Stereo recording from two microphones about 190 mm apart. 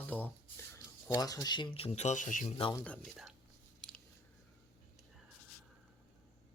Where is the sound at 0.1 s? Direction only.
10° left (ahead or behind).